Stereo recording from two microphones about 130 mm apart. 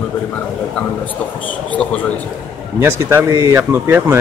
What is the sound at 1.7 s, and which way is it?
Speech, 10° left (ahead or behind).